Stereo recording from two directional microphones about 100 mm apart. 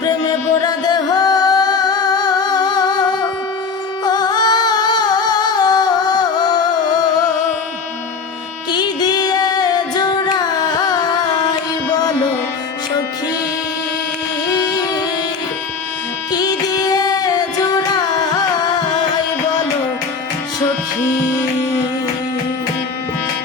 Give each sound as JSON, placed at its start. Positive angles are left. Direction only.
{"t": 0.6, "sound": "singing", "side_deg": 40}
{"t": 4.0, "sound": "music", "side_deg": 45}
{"t": 8.7, "sound": "music", "side_deg": 45}
{"t": 14.7, "sound": "music", "side_deg": 40}
{"t": 16.3, "sound": "music", "side_deg": 40}